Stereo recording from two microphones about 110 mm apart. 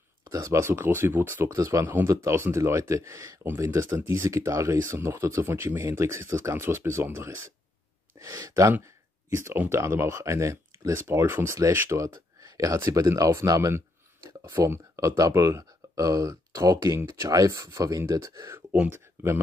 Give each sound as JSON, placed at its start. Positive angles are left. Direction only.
{"t": 0.3, "sound": "speech", "side_deg": -25}
{"t": 18.7, "sound": "speech", "side_deg": -20}